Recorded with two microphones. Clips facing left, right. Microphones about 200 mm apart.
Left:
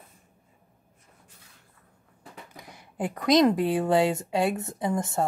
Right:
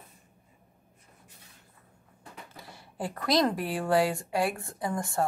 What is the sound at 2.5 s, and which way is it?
Speech, 20° left (ahead or behind).